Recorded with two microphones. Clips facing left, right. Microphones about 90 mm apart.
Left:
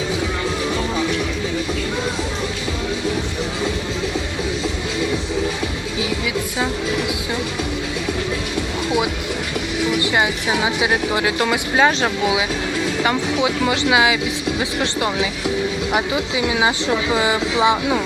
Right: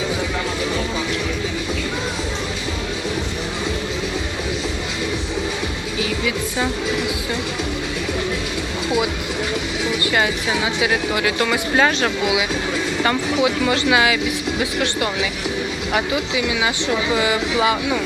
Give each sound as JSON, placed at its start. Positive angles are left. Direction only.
{"t": 10.1, "sound": "a woman's voice", "side_deg": 20}
{"t": 13.4, "sound": "a woman's voice", "side_deg": 20}